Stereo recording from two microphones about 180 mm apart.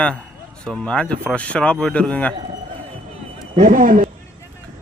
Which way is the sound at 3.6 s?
50° right (ahead or behind).